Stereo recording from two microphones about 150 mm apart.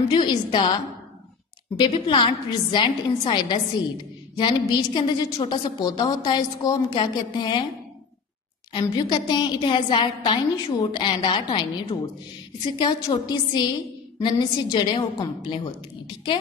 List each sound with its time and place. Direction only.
0.1 s a woman's voice: 30° left (ahead or behind)
1.8 s a woman's voice: 35° left (ahead or behind)
8.7 s a woman's voice: 30° left (ahead or behind)